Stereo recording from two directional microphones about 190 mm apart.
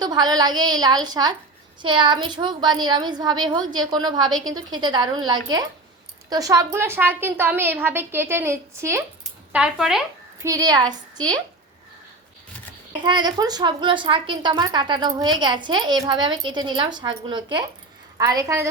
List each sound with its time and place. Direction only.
0.0 s a woman's voice: 20° right (ahead or behind)
9.2 s a sound: 5° right (ahead or behind)
10.4 s a woman's voice: 20° right (ahead or behind)
13.1 s a woman's voice: 25° right (ahead or behind)